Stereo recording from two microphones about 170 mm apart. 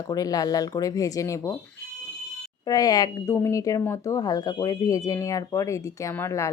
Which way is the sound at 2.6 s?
25° left (ahead or behind).